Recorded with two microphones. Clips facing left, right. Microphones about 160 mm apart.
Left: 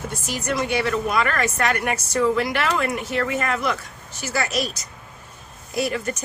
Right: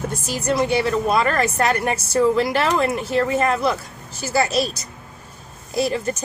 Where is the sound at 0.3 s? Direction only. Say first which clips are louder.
Right 4 dB; 30° right (ahead or behind).